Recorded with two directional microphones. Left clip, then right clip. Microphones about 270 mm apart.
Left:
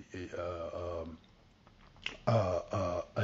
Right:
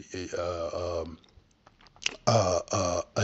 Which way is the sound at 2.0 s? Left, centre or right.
Right.